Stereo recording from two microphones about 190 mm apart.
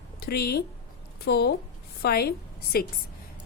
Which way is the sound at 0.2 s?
55° left (ahead or behind).